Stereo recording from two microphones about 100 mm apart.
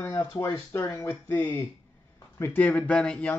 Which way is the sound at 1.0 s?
20° left (ahead or behind).